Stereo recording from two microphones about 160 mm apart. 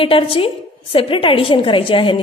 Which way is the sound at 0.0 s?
35° left (ahead or behind).